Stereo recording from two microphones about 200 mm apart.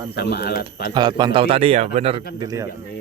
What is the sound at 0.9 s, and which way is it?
A man's voice, 20° right (ahead or behind).